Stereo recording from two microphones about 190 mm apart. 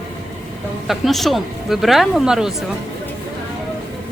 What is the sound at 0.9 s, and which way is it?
Speech, centre (ahead or behind).